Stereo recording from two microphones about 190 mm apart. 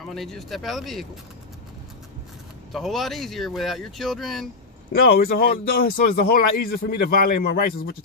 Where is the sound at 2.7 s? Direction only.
Centre (ahead or behind).